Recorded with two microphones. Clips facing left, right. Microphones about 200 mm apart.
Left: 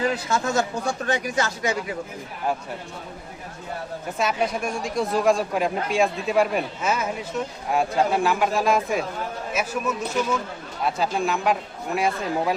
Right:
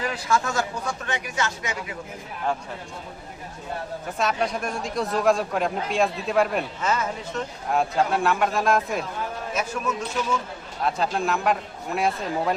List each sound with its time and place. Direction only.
0.0 s speech: 25° left (ahead or behind)
1.0 s speech: 35° left (ahead or behind)
4.2 s a man's voice: centre (ahead or behind)